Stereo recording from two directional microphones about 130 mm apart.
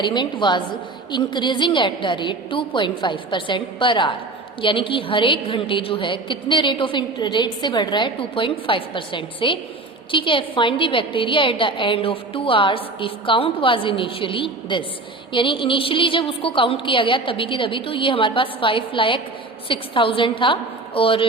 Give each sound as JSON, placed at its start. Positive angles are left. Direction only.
{"t": 0.0, "sound": "a woman's voice", "side_deg": 35}